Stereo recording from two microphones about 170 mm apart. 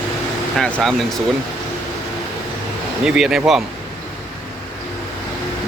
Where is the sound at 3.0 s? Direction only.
5° right (ahead or behind).